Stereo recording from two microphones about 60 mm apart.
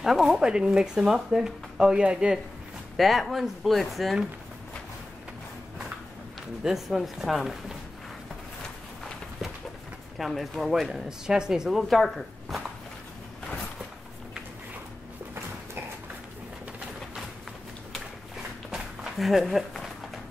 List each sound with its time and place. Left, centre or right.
0.0 s speech: centre
3.0 s speech: centre
6.6 s speech: centre
10.1 s speech: centre
18.7 s walk: centre